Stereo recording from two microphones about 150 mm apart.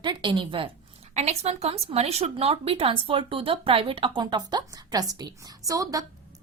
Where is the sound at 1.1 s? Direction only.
45° right (ahead or behind).